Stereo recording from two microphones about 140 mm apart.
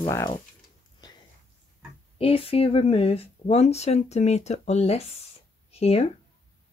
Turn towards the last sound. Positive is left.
turn(degrees=50)  # may be behind; listen again after turning